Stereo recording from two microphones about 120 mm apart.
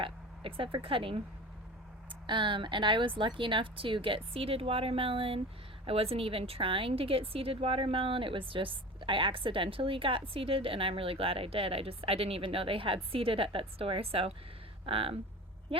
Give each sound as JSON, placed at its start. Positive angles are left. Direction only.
{"t": 0.0, "sound": "speech", "side_deg": -45}
{"t": 2.2, "sound": "a woman's voice", "side_deg": -40}